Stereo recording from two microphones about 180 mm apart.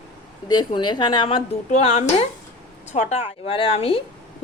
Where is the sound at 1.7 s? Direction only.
35° left (ahead or behind).